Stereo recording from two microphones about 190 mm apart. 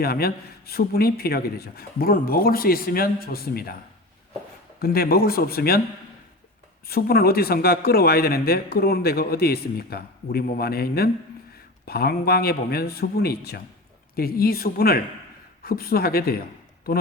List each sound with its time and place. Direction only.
0.0 s speech: 55° left (ahead or behind)
4.8 s speech: 55° left (ahead or behind)
6.8 s a man's voice: 55° left (ahead or behind)